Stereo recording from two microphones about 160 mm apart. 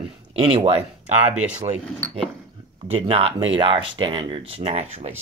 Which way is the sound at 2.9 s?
35° right (ahead or behind).